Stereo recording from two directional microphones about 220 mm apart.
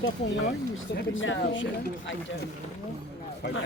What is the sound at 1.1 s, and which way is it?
Speech, 60° left (ahead or behind).